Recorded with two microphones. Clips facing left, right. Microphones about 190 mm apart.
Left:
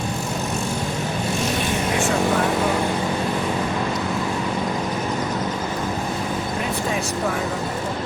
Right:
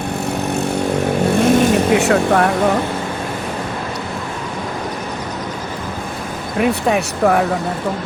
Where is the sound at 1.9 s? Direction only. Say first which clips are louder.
Right 7 dB; 65° right (ahead or behind).